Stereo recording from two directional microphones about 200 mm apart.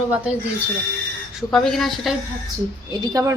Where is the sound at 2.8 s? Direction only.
20° right (ahead or behind).